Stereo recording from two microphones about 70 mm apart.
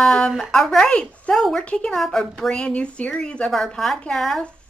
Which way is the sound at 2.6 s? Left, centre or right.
Centre.